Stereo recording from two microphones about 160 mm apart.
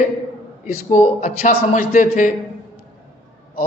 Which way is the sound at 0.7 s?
50° left (ahead or behind).